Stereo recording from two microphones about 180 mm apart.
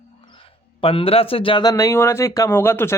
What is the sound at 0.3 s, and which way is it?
Speech, 30° left (ahead or behind).